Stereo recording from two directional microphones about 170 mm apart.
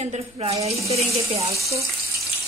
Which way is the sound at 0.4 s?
30° right (ahead or behind).